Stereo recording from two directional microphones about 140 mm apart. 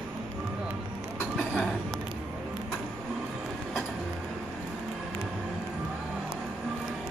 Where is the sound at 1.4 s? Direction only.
10° left (ahead or behind).